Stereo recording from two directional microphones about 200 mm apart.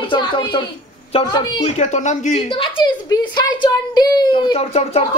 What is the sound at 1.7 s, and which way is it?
Speech, 35° left (ahead or behind).